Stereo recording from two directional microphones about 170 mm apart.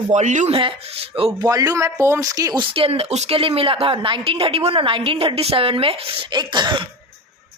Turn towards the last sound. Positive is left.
turn(degrees=-25)  # may be behind; listen again after turning